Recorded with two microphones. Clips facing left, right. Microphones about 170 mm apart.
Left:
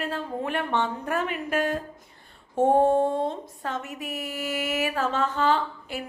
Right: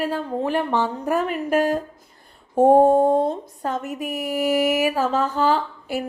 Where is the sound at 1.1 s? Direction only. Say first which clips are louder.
Right 7 dB; 40° right (ahead or behind).